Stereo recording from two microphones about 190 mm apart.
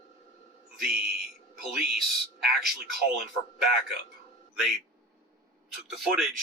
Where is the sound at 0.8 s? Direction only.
50° right (ahead or behind).